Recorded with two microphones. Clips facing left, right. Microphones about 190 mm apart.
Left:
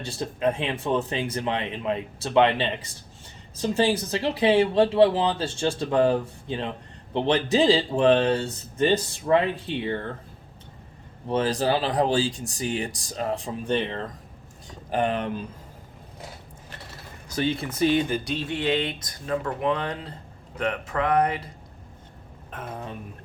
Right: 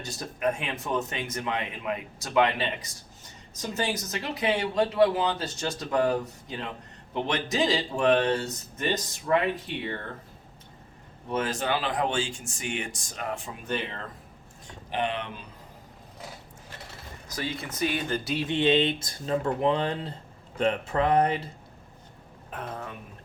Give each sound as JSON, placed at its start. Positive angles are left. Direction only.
{"t": 0.0, "sound": "speech", "side_deg": 30}
{"t": 11.3, "sound": "speech", "side_deg": 30}
{"t": 14.7, "sound": "speech", "side_deg": 45}
{"t": 17.2, "sound": "speech", "side_deg": 30}
{"t": 18.3, "sound": "speech", "side_deg": -20}
{"t": 22.5, "sound": "speech", "side_deg": 5}